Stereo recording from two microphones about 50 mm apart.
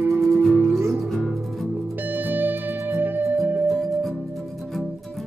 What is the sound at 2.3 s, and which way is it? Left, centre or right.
Music, right.